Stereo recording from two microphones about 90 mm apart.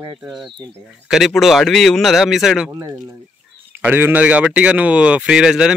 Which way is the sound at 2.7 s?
35° right (ahead or behind).